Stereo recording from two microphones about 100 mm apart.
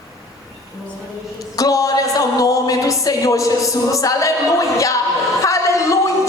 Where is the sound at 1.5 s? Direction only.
35° left (ahead or behind).